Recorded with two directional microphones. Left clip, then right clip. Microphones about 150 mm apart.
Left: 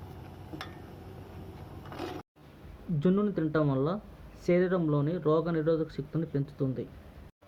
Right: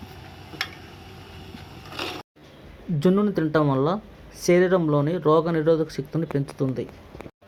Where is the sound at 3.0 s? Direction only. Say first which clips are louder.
Right 7 dB; 25° right (ahead or behind).